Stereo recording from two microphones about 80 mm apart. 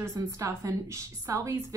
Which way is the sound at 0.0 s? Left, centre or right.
Right.